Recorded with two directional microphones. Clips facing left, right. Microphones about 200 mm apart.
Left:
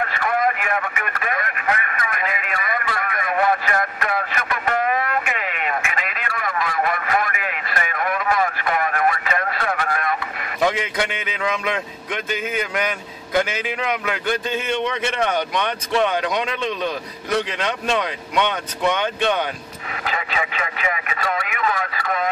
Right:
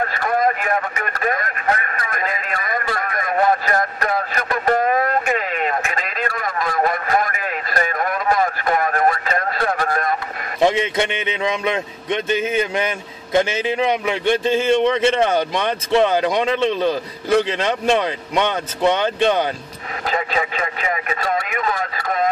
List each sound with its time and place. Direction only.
0.0 s radio: 40° right (ahead or behind)
10.6 s a man's voice: 25° right (ahead or behind)
20.1 s radio: 35° right (ahead or behind)